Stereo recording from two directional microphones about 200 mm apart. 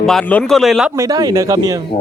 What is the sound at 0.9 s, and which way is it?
Speech, 15° right (ahead or behind).